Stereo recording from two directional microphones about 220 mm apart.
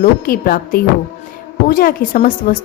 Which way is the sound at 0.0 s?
40° left (ahead or behind).